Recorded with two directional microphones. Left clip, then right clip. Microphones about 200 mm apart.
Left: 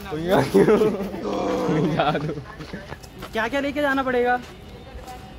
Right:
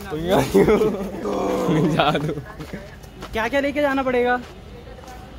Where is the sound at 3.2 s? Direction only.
10° right (ahead or behind).